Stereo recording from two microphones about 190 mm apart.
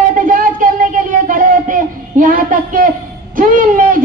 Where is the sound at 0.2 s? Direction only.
45° right (ahead or behind).